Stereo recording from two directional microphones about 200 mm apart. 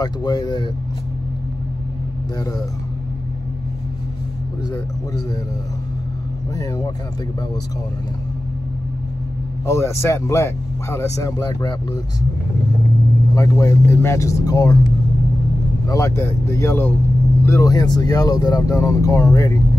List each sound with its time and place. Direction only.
0.0 s speech: 20° left (ahead or behind)
6.5 s speech: 15° left (ahead or behind)
9.7 s speech: 15° left (ahead or behind)
13.3 s speech: 15° left (ahead or behind)
15.9 s speech: 15° left (ahead or behind)